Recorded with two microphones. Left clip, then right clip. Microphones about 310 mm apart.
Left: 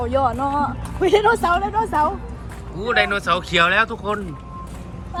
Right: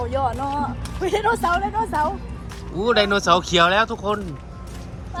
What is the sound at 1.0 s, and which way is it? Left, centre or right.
Speech, left.